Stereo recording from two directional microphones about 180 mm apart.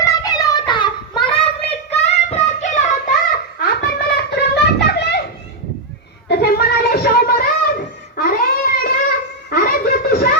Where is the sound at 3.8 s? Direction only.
65° left (ahead or behind).